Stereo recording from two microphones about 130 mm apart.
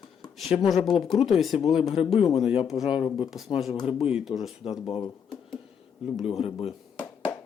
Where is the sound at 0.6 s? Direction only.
Centre (ahead or behind).